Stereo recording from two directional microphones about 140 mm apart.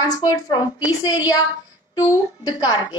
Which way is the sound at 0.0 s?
25° left (ahead or behind).